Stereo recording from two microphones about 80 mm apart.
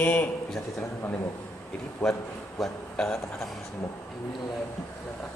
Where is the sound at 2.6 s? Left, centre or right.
Centre.